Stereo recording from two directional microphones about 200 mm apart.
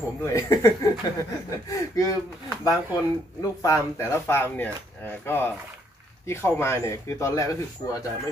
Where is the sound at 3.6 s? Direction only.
15° left (ahead or behind).